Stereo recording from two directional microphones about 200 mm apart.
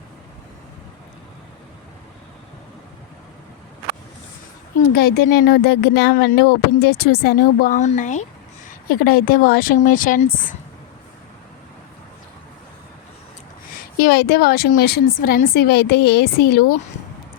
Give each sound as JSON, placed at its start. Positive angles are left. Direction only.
{"t": 4.9, "sound": "speech", "side_deg": 50}
{"t": 14.0, "sound": "speech", "side_deg": 50}